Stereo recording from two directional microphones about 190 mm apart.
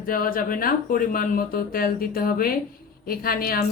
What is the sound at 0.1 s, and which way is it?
Speech, 50° left (ahead or behind).